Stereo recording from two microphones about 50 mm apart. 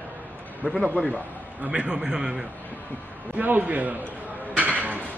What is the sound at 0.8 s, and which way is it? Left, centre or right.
Speech, left.